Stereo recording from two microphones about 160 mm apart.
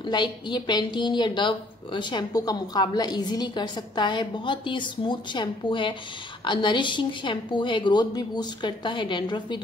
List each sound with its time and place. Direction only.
0.0 s a woman's voice: 30° left (ahead or behind)